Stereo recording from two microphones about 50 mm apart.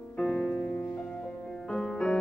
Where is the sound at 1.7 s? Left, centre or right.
Centre.